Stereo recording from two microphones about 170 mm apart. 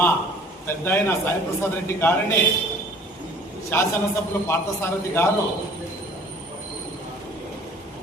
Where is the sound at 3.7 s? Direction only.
10° left (ahead or behind).